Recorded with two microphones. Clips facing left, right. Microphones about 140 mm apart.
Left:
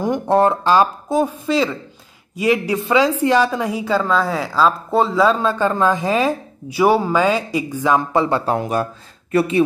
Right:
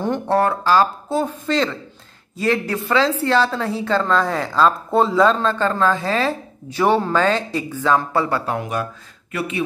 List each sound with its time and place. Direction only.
0.0 s a woman's voice: 10° left (ahead or behind)
8.5 s a man's voice: 35° left (ahead or behind)